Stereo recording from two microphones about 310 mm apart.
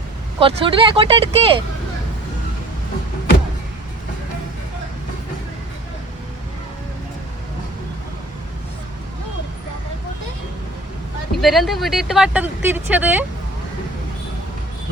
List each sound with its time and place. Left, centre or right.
0.3 s speech: centre
11.3 s speech: centre